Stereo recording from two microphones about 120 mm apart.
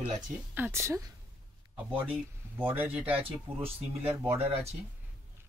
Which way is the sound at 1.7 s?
10° right (ahead or behind).